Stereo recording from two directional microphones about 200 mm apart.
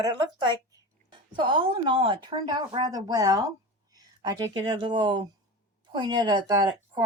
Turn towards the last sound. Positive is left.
turn(degrees=-20)  # may be behind; listen again after turning